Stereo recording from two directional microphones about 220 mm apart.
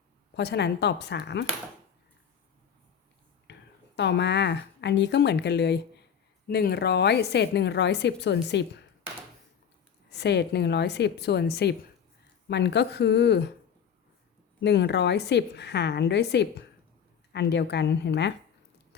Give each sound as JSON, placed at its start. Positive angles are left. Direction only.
{"t": 0.3, "sound": "a woman's voice", "side_deg": 50}
{"t": 3.5, "sound": "a sound", "side_deg": 50}
{"t": 3.9, "sound": "a woman's voice", "side_deg": 50}
{"t": 10.1, "sound": "a woman's voice", "side_deg": 50}
{"t": 14.6, "sound": "a woman's voice", "side_deg": 50}